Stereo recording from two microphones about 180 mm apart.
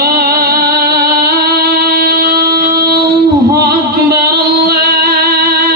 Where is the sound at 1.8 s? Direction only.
60° right (ahead or behind).